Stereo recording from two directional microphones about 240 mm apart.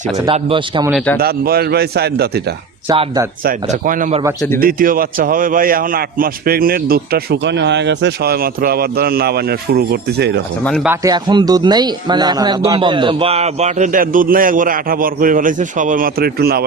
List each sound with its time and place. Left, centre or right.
0.2 s speech: right
1.2 s a man's voice: right
2.9 s speech: right
3.4 s a man's voice: right
4.4 s a man's voice: centre
4.6 s a man's voice: right
10.6 s speech: centre
10.8 s speech: centre; by 16.6 s right